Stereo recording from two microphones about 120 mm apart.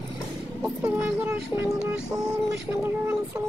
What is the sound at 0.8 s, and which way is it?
Speech, 20° right (ahead or behind).